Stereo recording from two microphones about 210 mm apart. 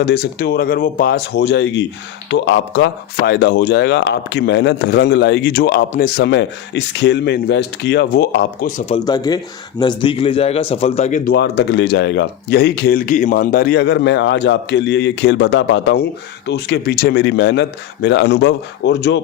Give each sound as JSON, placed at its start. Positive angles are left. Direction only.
{"t": 0.0, "sound": "speech", "side_deg": 45}
{"t": 9.0, "sound": "a man's voice", "side_deg": 20}
{"t": 11.3, "sound": "speech", "side_deg": 50}